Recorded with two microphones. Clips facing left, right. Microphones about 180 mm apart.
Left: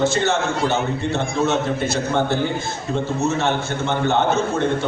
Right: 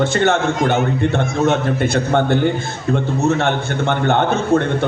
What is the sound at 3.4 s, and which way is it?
Speech, 60° right (ahead or behind).